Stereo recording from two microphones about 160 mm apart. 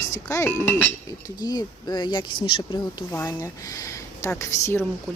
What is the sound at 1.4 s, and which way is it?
A woman's voice, 25° left (ahead or behind).